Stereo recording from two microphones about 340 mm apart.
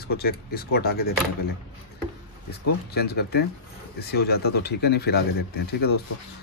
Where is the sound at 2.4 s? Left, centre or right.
Left.